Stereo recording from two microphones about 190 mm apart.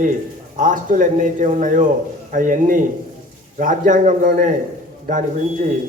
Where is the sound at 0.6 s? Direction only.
45° right (ahead or behind).